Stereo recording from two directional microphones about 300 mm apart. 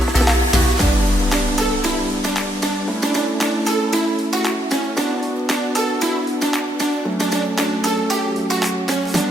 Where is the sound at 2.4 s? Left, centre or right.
Centre.